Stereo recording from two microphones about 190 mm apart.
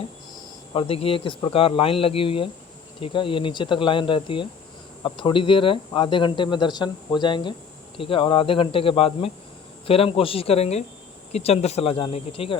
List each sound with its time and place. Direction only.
0.7 s speech: 30° left (ahead or behind)